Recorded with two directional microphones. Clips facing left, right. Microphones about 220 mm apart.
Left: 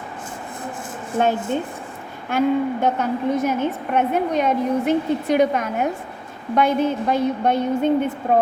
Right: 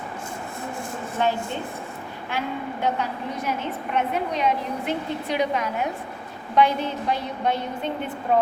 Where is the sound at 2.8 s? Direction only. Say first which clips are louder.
Left 6 dB; 45° left (ahead or behind).